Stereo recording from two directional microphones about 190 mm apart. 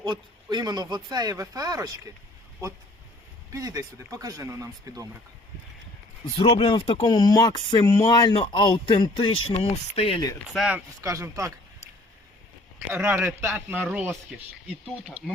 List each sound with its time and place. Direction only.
0.0 s speech: 25° right (ahead or behind)
3.5 s speech: 15° right (ahead or behind)
6.3 s speech: 30° left (ahead or behind)
10.5 s speech: 5° right (ahead or behind)
11.0 s speech: 15° right (ahead or behind)
12.9 s speech: 10° right (ahead or behind)